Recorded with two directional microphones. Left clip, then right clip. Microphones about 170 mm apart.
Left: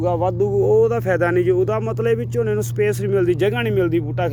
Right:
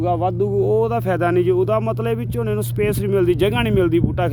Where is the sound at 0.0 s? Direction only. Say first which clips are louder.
Even; 20° right (ahead or behind).